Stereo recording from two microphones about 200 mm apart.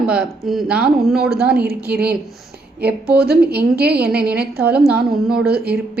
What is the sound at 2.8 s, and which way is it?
A woman's voice, 55° right (ahead or behind).